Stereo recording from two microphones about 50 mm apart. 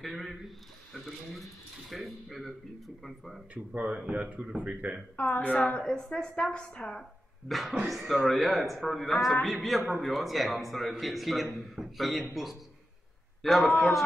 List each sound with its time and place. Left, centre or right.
0.0 s a man's voice: centre
3.5 s a man's voice: right
5.1 s a woman's voice: left
5.9 s speech: centre
7.4 s a man's voice: centre
13.4 s a man's voice: centre